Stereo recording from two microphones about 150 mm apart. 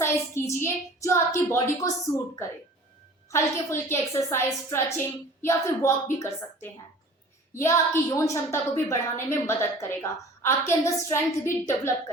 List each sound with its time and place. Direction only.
0.0 s a woman's voice: 20° left (ahead or behind)
3.3 s a woman's voice: 20° left (ahead or behind)